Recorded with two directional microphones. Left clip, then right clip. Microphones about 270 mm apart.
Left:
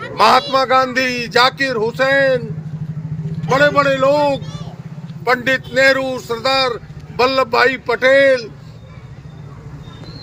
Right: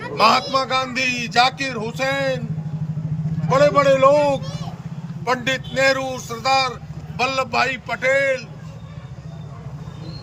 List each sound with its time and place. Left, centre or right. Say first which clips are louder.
0.0 s a man's voice: left 4 dB; centre
3.5 s a man's voice: left 2 dB; centre